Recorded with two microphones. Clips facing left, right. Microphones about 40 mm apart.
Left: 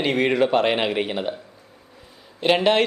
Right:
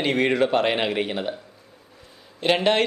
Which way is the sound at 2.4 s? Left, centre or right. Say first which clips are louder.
Left 2 dB; centre.